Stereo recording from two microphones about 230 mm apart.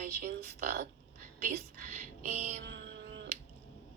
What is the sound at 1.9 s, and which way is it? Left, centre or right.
Music, right.